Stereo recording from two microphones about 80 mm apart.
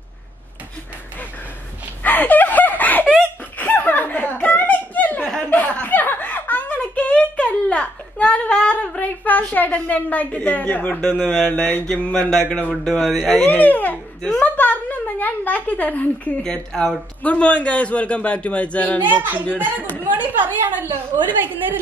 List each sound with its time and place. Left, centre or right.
2.0 s a sound: left
3.5 s laughter: left
5.4 s chuckle: centre
11.0 s a man's voice: centre
11.4 s speech: centre
12.1 s speech: centre
13.5 s a man's voice: left
19.0 s a woman's voice: right